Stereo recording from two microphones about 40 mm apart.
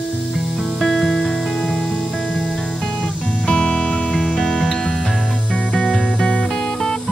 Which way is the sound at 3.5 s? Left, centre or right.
Left.